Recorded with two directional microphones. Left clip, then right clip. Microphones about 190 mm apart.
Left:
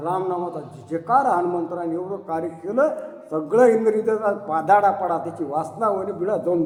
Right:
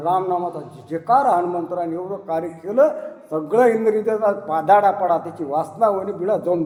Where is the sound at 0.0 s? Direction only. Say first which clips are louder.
Right 4 dB; 25° right (ahead or behind).